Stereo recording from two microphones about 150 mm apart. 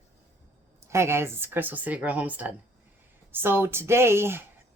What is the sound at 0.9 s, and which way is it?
Speech, 15° right (ahead or behind).